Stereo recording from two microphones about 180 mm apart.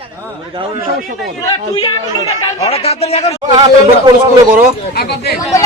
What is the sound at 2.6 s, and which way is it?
Speech, 35° left (ahead or behind).